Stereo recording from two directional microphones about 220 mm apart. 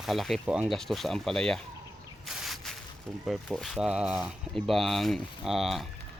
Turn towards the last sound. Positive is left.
turn(degrees=0)  # may be behind; listen again after turning